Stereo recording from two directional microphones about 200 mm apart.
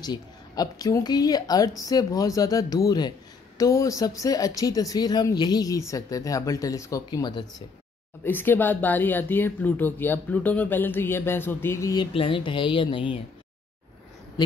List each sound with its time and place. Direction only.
0.0 s speech: 20° left (ahead or behind)
8.2 s speech: 10° left (ahead or behind); by 13.2 s 25° left (ahead or behind)